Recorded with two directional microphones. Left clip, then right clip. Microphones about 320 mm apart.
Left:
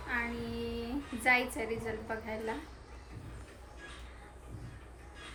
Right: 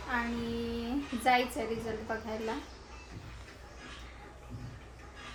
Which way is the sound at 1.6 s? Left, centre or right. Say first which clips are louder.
Right 2 dB; centre.